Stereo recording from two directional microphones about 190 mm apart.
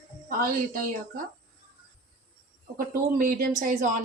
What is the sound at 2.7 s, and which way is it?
A woman's voice, 45° right (ahead or behind).